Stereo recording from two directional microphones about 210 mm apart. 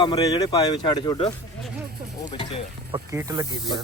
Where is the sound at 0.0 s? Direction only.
20° left (ahead or behind).